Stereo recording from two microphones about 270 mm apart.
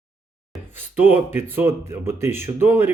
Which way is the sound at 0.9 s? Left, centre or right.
Centre.